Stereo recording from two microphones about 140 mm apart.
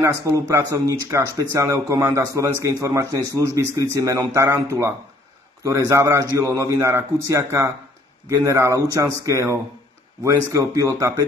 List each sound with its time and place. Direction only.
0.0 s speech: 25° right (ahead or behind)